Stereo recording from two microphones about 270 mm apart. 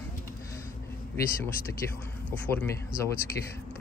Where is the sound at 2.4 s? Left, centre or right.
Centre.